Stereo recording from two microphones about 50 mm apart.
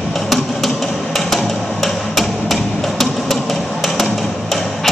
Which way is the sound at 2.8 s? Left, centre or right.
Centre.